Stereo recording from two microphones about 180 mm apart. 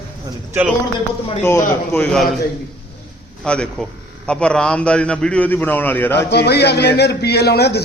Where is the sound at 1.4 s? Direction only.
10° left (ahead or behind).